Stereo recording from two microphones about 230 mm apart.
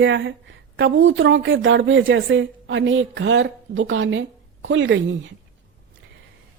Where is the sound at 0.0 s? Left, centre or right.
Right.